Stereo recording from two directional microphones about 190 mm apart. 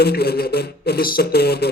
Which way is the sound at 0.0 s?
55° left (ahead or behind).